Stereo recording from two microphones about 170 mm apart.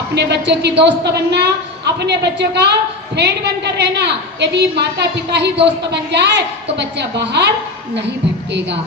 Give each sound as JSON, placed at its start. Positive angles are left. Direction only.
{"t": 0.1, "sound": "a woman's voice", "side_deg": -85}